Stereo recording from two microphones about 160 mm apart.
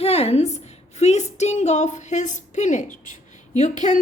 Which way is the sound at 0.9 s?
45° left (ahead or behind).